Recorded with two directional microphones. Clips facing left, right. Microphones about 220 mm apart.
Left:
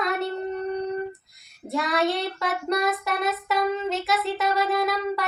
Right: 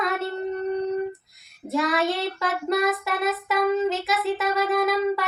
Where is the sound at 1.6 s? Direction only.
Centre (ahead or behind).